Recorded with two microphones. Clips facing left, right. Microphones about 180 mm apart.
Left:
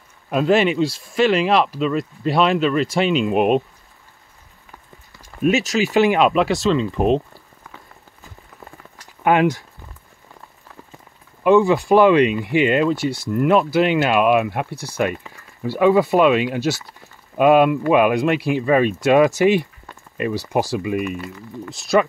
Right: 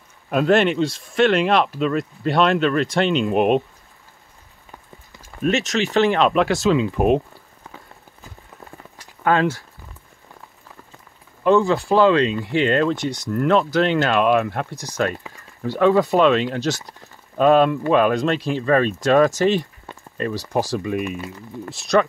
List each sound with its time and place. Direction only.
0.3 s speech: centre (ahead or behind)
5.4 s speech: 5° left (ahead or behind)
9.2 s speech: 15° left (ahead or behind)
11.4 s speech: 15° left (ahead or behind)
14.7 s speech: 15° right (ahead or behind)
15.6 s speech: 10° left (ahead or behind)
20.7 s speech: 5° left (ahead or behind)